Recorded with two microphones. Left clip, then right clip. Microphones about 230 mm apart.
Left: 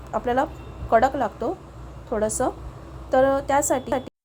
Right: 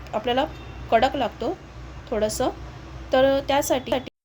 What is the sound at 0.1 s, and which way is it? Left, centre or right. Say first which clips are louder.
A woman's voice: even; centre.